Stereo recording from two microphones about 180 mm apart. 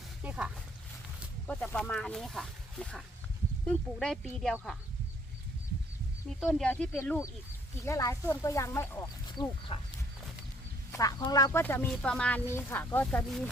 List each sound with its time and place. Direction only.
0.2 s a sound: 5° right (ahead or behind)
1.5 s speech: 5° left (ahead or behind)
6.4 s speech: 5° left (ahead or behind)
9.4 s speech: 30° left (ahead or behind)
10.9 s speech: 20° left (ahead or behind)